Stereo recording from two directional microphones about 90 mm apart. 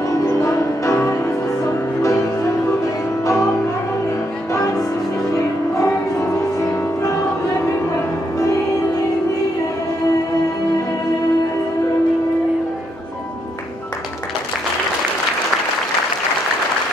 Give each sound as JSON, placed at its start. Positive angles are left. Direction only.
{"t": 0.1, "sound": "music", "side_deg": 35}
{"t": 4.5, "sound": "music", "side_deg": 40}